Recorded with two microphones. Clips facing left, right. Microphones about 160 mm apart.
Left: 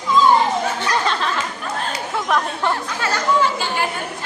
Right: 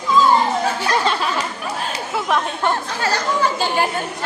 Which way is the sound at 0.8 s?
10° right (ahead or behind).